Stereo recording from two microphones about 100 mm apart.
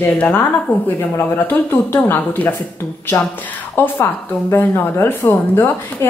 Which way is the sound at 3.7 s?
20° left (ahead or behind).